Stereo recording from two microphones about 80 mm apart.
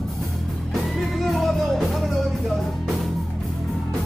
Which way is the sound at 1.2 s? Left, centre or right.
Centre.